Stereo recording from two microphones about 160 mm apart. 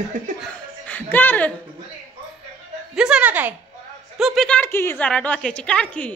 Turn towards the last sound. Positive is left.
turn(degrees=5)  # may be behind; listen again after turning